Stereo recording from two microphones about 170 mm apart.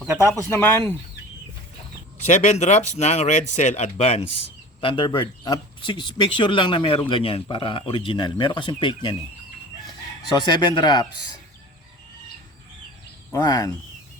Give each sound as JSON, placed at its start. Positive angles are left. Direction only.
{"t": 0.2, "sound": "speech", "side_deg": 15}
{"t": 2.2, "sound": "a man's voice", "side_deg": 45}
{"t": 10.3, "sound": "a man's voice", "side_deg": 25}
{"t": 13.3, "sound": "a man's voice", "side_deg": 20}